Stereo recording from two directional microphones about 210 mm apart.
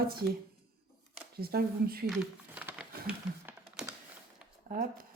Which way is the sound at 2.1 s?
5° right (ahead or behind).